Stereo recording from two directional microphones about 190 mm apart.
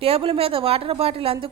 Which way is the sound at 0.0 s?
30° right (ahead or behind).